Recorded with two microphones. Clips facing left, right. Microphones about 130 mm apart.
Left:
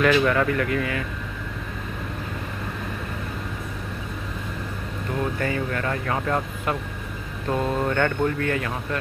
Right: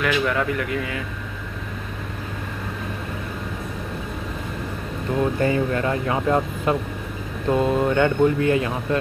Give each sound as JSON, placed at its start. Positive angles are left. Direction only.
{"t": 0.0, "sound": "speech", "side_deg": -10}
{"t": 5.1, "sound": "speech", "side_deg": -25}